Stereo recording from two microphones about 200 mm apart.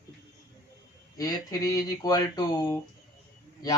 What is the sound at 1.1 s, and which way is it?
Speech, 20° left (ahead or behind).